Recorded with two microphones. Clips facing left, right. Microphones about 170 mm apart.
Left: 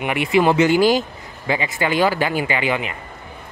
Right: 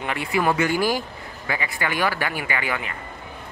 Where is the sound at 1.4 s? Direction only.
25° left (ahead or behind).